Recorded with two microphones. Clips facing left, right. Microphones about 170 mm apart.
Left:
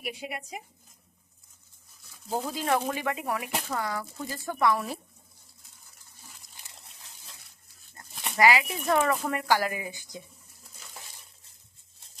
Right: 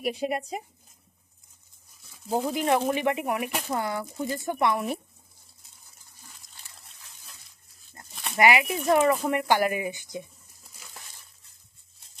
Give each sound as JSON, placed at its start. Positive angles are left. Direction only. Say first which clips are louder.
{"t": 0.0, "sound": "speech", "louder": "right 9 dB", "side_deg": -40}
{"t": 2.5, "sound": "speech", "louder": "right 3 dB", "side_deg": -20}
{"t": 8.4, "sound": "speech", "louder": "right 1 dB", "side_deg": -20}